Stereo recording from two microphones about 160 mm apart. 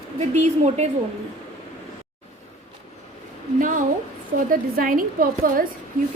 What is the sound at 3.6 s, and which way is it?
A woman's voice, 55° right (ahead or behind).